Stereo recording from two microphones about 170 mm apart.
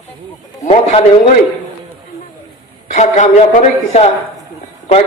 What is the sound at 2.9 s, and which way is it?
A man's voice, 45° left (ahead or behind).